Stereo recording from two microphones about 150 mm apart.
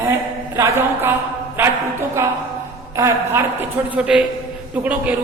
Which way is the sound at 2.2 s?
20° right (ahead or behind).